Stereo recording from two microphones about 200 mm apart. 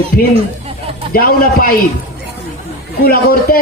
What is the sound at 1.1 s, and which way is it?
Speech, 45° left (ahead or behind).